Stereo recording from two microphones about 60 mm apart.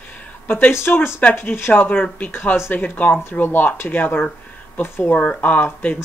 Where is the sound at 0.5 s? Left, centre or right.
Left.